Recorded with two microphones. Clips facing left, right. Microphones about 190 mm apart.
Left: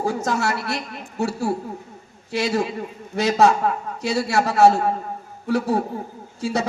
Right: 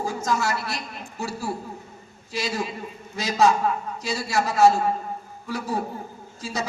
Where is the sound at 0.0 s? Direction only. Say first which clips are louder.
Left 3 dB; 65° left (ahead or behind).